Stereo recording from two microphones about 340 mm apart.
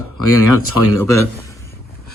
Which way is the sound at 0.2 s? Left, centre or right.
Left.